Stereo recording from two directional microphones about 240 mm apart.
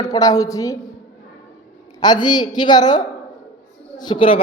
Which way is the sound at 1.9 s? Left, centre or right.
Centre.